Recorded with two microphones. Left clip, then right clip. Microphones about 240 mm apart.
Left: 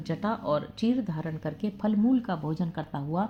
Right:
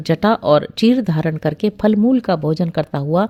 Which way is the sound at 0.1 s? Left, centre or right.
Right.